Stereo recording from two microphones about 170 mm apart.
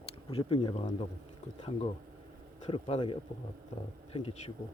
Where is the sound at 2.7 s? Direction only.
30° left (ahead or behind).